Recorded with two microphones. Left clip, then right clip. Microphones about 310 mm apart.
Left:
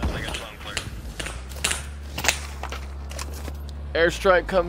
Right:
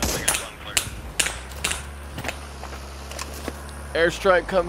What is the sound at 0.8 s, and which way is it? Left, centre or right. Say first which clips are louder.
Finger snapping: right 7 dB; centre.